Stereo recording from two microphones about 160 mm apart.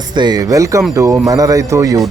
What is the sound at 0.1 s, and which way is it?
Speech, 25° right (ahead or behind).